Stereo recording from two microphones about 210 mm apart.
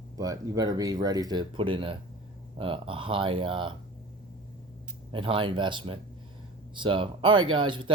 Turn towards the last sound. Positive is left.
turn(degrees=-25)  # may be behind; listen again after turning